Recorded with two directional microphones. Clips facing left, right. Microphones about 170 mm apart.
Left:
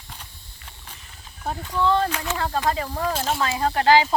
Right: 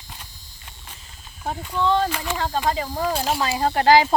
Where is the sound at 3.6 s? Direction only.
35° right (ahead or behind).